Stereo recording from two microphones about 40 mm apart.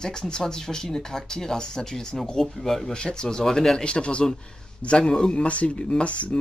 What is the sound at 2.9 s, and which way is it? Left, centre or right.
Speech, left.